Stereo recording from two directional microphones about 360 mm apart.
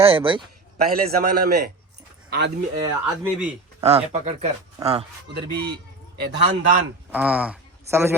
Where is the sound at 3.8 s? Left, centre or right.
Centre.